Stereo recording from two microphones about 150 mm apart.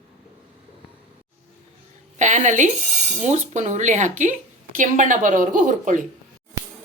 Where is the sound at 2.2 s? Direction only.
55° right (ahead or behind).